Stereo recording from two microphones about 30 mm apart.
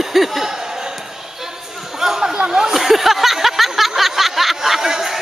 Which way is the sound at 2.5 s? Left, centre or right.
Centre.